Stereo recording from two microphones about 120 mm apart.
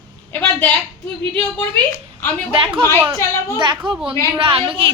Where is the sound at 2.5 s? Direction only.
50° right (ahead or behind).